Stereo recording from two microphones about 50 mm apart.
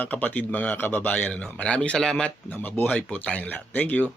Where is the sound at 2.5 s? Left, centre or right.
Left.